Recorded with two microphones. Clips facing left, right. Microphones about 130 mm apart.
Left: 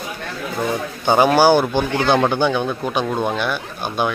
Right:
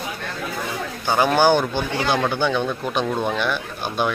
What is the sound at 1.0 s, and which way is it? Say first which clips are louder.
Speech: left 5 dB; 20° left (ahead or behind).